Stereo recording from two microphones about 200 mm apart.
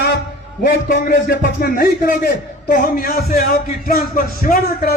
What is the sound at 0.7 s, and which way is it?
A man's voice, 50° left (ahead or behind).